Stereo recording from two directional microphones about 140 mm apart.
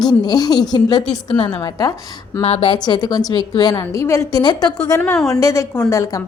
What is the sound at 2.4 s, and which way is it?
A woman's voice, 40° left (ahead or behind).